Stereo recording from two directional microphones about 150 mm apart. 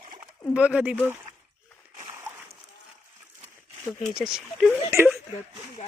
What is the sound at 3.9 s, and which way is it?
Speech, 5° right (ahead or behind).